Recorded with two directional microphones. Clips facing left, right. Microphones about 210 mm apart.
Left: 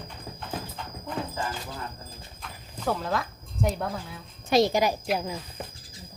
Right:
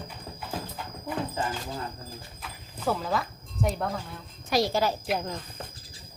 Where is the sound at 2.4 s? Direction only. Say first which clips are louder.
Even; 5° right (ahead or behind).